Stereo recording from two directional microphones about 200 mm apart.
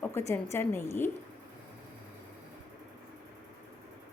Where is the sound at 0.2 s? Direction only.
10° left (ahead or behind).